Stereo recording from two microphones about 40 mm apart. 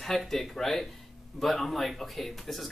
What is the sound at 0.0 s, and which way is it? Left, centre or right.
Speech, centre.